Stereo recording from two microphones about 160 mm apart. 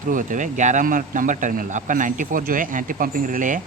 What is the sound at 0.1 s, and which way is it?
Speech, 55° right (ahead or behind).